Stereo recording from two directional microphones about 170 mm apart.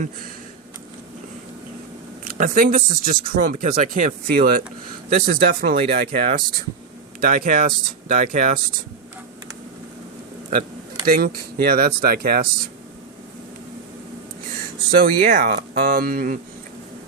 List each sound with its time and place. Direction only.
2.4 s speech: 55° right (ahead or behind)
11.0 s speech: 60° right (ahead or behind)
14.8 s speech: 55° right (ahead or behind)